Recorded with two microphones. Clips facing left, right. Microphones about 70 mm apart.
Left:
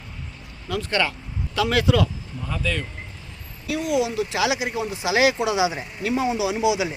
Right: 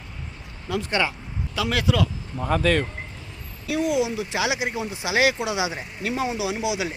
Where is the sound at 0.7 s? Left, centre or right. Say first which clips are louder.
Even; centre.